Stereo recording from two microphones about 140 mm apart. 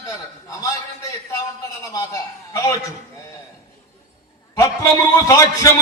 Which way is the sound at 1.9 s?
25° left (ahead or behind).